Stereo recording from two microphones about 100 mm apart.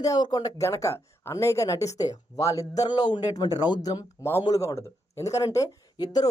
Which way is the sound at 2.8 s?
45° left (ahead or behind).